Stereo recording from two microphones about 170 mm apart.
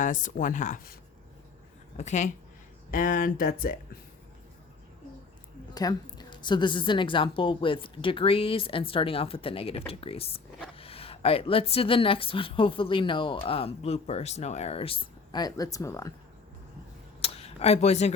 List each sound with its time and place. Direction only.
0.0 s speech: 50° left (ahead or behind)
2.0 s speech: 45° left (ahead or behind)
5.7 s a woman's voice: 25° left (ahead or behind)
17.2 s a sound: 35° left (ahead or behind)